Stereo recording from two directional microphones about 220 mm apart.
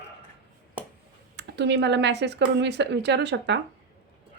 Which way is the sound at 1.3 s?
50° right (ahead or behind).